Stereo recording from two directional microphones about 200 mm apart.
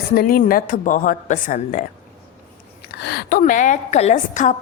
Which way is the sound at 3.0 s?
55° left (ahead or behind).